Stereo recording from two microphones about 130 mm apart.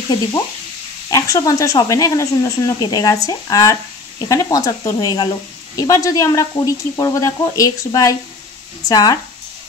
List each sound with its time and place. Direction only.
1.1 s speech: 25° left (ahead or behind)